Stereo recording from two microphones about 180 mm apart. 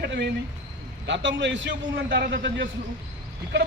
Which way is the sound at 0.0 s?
70° right (ahead or behind).